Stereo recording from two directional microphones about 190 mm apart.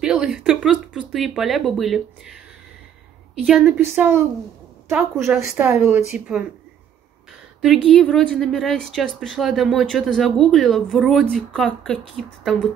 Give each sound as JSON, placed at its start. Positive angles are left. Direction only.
{"t": 0.0, "sound": "a woman's voice", "side_deg": -5}
{"t": 7.6, "sound": "a woman's voice", "side_deg": 0}